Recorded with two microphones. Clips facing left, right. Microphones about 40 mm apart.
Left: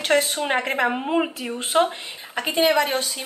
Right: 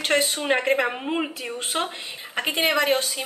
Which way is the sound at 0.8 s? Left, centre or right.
Centre.